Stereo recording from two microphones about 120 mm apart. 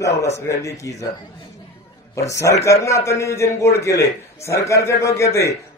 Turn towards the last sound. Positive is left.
turn(degrees=25)  # may be behind; listen again after turning